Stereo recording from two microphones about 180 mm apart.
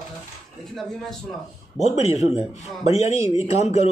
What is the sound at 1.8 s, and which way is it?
Speech, 35° left (ahead or behind).